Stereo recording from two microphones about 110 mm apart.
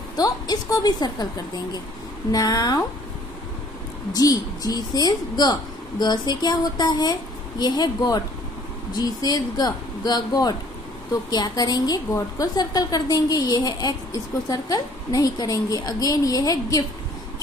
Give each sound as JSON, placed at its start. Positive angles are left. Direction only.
{"t": 0.1, "sound": "speech", "side_deg": 35}
{"t": 2.3, "sound": "speech", "side_deg": 35}
{"t": 4.1, "sound": "speech", "side_deg": 35}